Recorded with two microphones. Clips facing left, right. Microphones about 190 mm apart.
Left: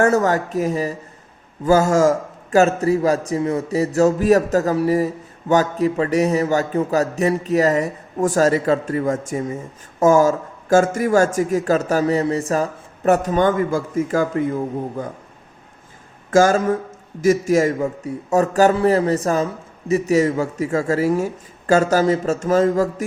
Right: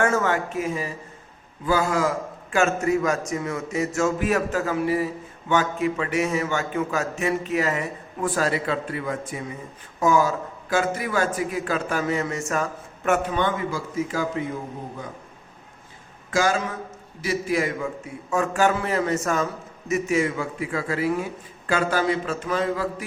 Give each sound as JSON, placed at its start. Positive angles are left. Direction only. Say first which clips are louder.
{"t": 0.0, "sound": "a man's voice", "louder": "left 6 dB", "side_deg": 40}
{"t": 16.3, "sound": "a man's voice", "louder": "left 8 dB", "side_deg": 45}